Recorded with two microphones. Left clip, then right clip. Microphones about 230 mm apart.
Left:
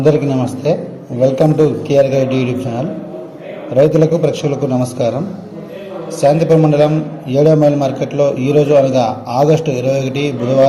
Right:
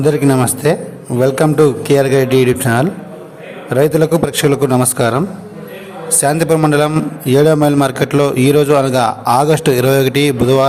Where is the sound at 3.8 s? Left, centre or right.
Right.